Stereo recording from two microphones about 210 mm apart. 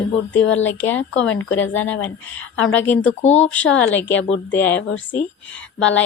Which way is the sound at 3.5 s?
5° left (ahead or behind).